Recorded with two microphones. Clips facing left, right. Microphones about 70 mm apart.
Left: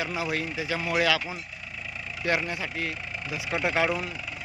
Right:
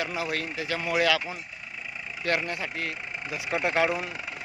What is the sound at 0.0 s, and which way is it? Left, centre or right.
Speech, centre.